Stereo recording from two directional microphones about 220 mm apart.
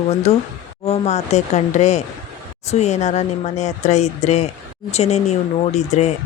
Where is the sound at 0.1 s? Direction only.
25° left (ahead or behind).